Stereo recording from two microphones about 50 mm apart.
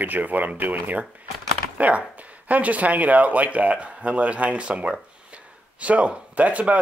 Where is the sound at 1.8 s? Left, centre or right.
Right.